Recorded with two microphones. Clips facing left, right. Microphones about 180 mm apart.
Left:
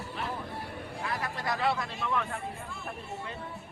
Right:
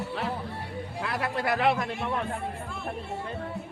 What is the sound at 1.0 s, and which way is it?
A man's voice, 70° right (ahead or behind).